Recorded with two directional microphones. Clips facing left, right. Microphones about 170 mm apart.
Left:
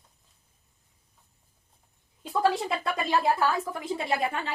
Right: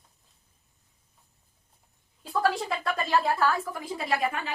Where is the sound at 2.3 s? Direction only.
20° left (ahead or behind).